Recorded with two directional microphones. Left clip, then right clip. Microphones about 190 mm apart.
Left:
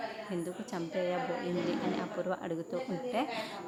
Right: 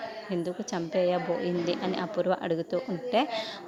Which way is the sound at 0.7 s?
35° right (ahead or behind).